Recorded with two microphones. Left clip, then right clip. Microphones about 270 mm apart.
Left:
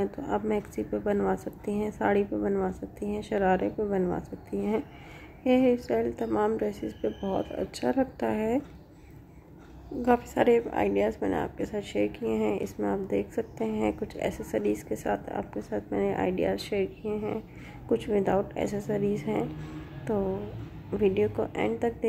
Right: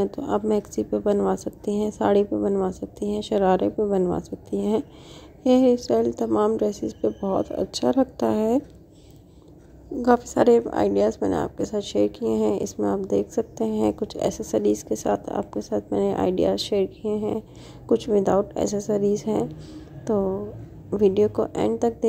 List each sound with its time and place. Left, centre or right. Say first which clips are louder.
0.3 s a woman's voice: right 6 dB; right
10.0 s a woman's voice: right 5 dB; right